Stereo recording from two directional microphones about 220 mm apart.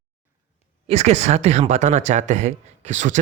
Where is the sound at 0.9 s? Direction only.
30° right (ahead or behind).